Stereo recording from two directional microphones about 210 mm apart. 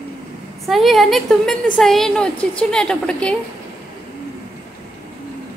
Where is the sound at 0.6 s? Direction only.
Centre (ahead or behind).